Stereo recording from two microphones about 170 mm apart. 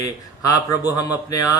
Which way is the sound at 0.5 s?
20° left (ahead or behind).